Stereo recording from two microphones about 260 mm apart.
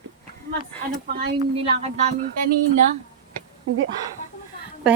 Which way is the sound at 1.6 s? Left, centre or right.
Right.